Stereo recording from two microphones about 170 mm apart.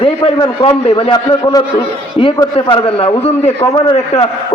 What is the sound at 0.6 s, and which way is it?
A man's voice, 30° left (ahead or behind).